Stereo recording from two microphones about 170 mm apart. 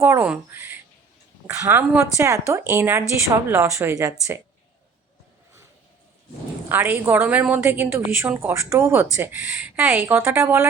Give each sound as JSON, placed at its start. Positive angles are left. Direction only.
{"t": 0.0, "sound": "a woman's voice", "side_deg": -10}
{"t": 6.7, "sound": "a woman's voice", "side_deg": -10}